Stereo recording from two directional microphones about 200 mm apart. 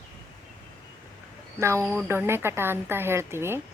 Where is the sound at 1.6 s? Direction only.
15° right (ahead or behind).